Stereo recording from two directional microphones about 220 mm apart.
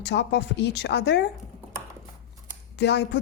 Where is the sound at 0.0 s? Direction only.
50° left (ahead or behind).